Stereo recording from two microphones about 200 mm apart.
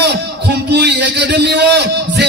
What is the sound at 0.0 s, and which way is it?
A man's voice, 55° right (ahead or behind).